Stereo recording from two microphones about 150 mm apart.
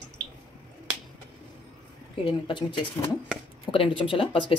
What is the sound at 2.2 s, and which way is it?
Speech, 35° left (ahead or behind).